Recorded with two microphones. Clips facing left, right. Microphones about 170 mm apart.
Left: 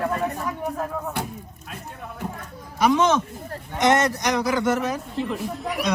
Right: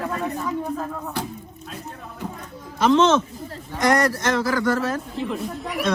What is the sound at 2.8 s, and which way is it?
Speech, 10° left (ahead or behind).